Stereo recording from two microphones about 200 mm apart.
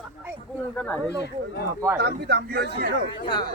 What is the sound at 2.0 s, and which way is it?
Speech, 55° right (ahead or behind).